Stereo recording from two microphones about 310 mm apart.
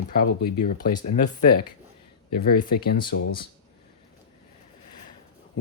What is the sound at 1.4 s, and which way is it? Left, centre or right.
Speech, left.